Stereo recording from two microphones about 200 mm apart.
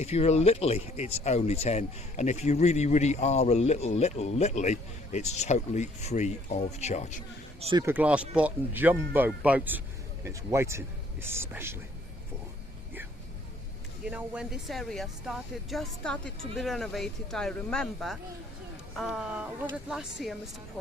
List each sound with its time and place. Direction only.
0.0 s speech: 30° left (ahead or behind)
7.6 s speech: 25° right (ahead or behind)
7.9 s speech: 5° right (ahead or behind)
14.0 s speech: 5° right (ahead or behind)